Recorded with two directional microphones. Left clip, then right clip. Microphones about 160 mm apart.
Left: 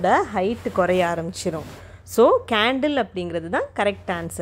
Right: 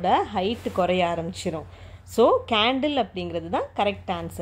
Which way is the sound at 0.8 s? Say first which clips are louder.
Left 3 dB; 25° left (ahead or behind).